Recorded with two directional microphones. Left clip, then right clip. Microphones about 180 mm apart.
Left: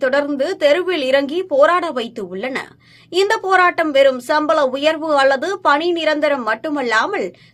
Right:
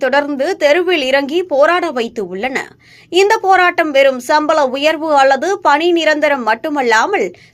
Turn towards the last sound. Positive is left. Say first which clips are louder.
# right 5 dB
turn(degrees=-20)  # may be behind; listen again after turning